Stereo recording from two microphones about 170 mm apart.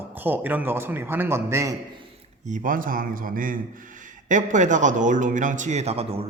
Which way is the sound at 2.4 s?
50° right (ahead or behind).